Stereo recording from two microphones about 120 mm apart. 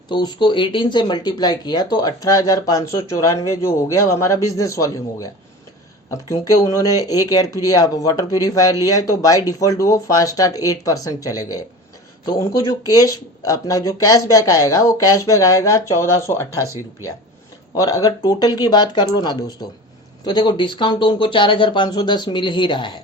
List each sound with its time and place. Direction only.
0.1 s speech: 40° left (ahead or behind)